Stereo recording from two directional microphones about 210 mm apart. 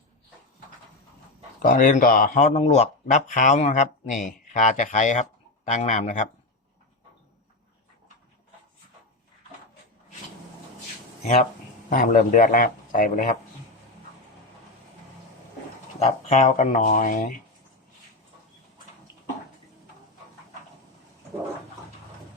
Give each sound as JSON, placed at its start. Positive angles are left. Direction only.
{"t": 1.5, "sound": "speech", "side_deg": 40}
{"t": 11.9, "sound": "speech", "side_deg": 40}
{"t": 16.0, "sound": "speech", "side_deg": 35}